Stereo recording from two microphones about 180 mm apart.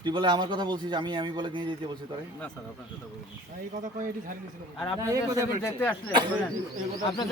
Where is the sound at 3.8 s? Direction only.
50° right (ahead or behind).